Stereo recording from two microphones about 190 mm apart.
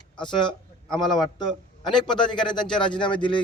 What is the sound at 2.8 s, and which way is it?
Speech, 25° left (ahead or behind).